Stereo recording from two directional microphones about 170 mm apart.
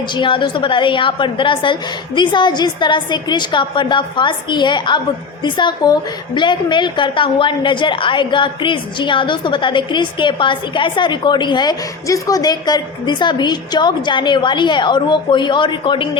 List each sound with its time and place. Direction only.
0.1 s a woman's voice: 30° left (ahead or behind)